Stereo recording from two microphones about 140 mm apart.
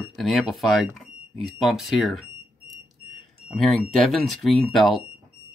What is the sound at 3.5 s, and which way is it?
Speech, centre (ahead or behind).